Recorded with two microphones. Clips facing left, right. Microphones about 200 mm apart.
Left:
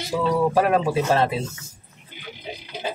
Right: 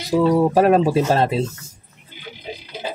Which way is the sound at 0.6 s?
40° right (ahead or behind).